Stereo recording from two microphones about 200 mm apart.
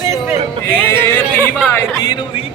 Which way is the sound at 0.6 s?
10° left (ahead or behind).